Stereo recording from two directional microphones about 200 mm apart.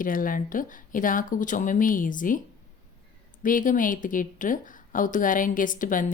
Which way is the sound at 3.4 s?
40° left (ahead or behind).